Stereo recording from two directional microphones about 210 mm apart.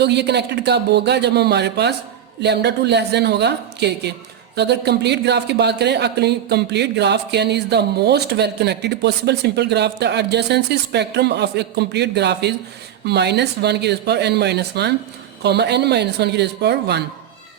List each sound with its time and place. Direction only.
0.0 s speech: 55° right (ahead or behind)